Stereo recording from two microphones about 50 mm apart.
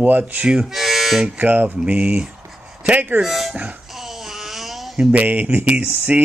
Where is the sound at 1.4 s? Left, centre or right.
Right.